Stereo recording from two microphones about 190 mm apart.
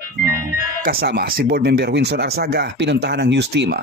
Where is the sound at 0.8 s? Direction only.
55° right (ahead or behind).